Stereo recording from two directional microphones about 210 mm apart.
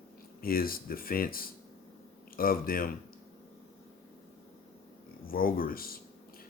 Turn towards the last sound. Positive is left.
turn(degrees=45)  # may be behind; listen again after turning